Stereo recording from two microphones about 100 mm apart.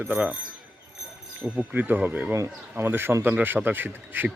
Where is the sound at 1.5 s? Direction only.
15° right (ahead or behind).